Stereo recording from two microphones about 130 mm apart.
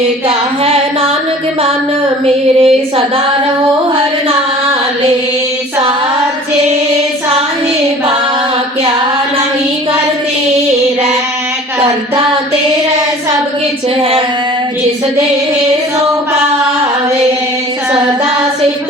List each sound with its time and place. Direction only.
0.3 s child singing: 45° right (ahead or behind)
2.2 s child singing: 50° right (ahead or behind)